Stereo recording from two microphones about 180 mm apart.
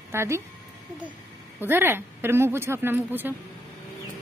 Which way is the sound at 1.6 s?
10° right (ahead or behind).